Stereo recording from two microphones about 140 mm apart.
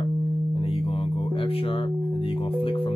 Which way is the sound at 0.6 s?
40° left (ahead or behind).